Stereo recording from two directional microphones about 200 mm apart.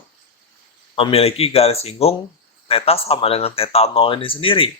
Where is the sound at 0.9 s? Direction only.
30° left (ahead or behind).